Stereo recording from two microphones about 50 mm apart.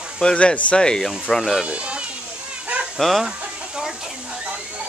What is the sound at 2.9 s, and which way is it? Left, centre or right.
Speech, centre.